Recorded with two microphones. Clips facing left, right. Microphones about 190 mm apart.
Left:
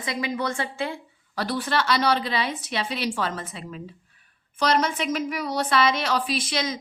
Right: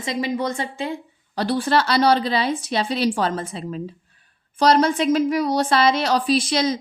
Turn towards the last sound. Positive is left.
turn(degrees=-30)  # may be behind; listen again after turning